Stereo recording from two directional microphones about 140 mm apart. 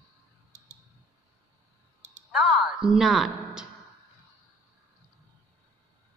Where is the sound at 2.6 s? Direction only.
35° right (ahead or behind).